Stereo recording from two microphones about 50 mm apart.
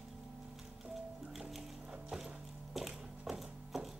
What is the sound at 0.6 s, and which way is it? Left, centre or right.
Music, centre.